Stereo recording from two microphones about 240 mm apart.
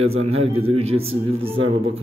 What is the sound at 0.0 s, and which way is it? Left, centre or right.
A man's voice, right.